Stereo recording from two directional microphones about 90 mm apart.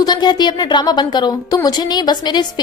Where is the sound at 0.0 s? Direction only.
55° left (ahead or behind).